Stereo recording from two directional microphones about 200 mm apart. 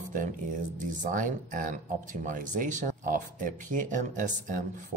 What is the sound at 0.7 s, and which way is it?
Speech, 40° right (ahead or behind).